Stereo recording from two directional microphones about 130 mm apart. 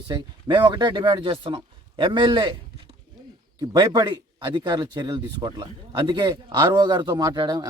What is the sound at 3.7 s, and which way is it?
Speech, 30° right (ahead or behind).